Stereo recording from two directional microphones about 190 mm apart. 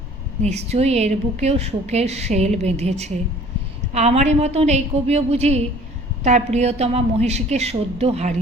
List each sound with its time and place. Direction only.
0.4 s a woman's voice: 35° right (ahead or behind)